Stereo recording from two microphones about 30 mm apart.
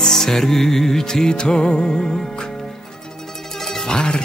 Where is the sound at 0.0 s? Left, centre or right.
Centre.